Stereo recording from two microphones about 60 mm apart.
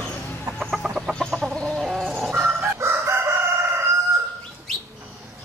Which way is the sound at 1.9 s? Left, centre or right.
Centre.